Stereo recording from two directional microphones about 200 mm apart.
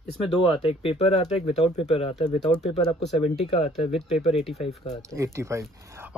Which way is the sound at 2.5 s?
5° left (ahead or behind).